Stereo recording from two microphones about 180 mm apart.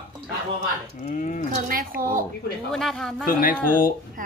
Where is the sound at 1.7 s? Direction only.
50° right (ahead or behind).